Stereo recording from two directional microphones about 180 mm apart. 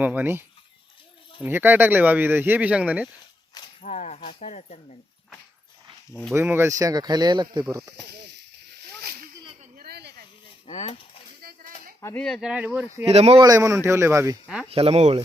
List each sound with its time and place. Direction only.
0.0 s speech: 10° right (ahead or behind)
3.5 s a sound: 30° left (ahead or behind)
4.3 s speech: 40° left (ahead or behind)
6.3 s speech: 10° right (ahead or behind)
7.9 s snake: 70° right (ahead or behind)
8.7 s splash: 60° right (ahead or behind)
9.7 s a sound: 60° right (ahead or behind)
10.7 s speech: 35° left (ahead or behind)
11.4 s a sound: 55° right (ahead or behind)
11.9 s speech: 15° left (ahead or behind)
12.2 s speech: centre (ahead or behind)
13.1 s speech: 35° right (ahead or behind)
13.4 s speech: 20° right (ahead or behind)
14.7 s speech: 35° right (ahead or behind)